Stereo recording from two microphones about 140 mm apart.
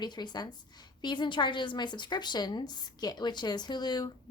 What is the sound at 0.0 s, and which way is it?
A woman's voice, 30° left (ahead or behind).